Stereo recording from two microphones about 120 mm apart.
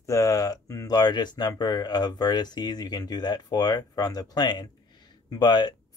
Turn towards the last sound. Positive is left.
turn(degrees=35)  # may be behind; listen again after turning